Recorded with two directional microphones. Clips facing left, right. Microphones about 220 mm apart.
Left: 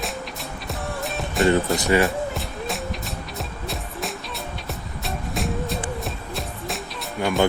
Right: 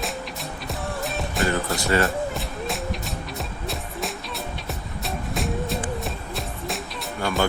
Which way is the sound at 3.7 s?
Centre (ahead or behind).